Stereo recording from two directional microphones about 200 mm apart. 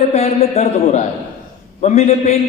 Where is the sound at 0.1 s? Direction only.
35° left (ahead or behind).